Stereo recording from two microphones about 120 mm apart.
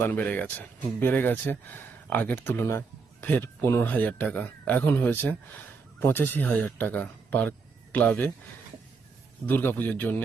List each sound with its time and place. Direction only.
0.0 s speech: 15° left (ahead or behind)
9.5 s speech: 15° left (ahead or behind)